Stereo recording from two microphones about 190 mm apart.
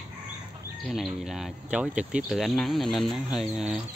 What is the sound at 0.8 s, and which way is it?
Speech, centre (ahead or behind).